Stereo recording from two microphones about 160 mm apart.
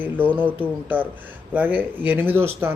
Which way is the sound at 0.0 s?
10° right (ahead or behind).